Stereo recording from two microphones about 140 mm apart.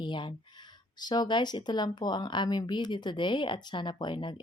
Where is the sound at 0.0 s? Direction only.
35° left (ahead or behind).